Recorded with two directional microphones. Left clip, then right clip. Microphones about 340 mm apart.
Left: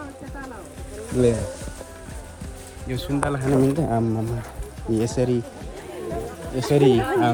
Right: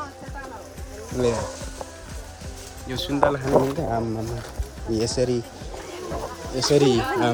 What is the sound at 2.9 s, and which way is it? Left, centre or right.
Speech, right.